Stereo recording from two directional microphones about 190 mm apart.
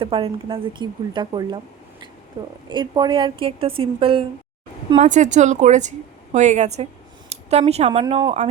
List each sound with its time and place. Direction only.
0.0 s a woman's voice: 30° right (ahead or behind)
2.6 s a woman's voice: 25° right (ahead or behind)
4.9 s speech: 40° right (ahead or behind)